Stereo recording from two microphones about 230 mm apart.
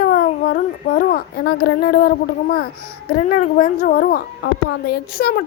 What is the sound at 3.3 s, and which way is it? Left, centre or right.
A woman's voice, left.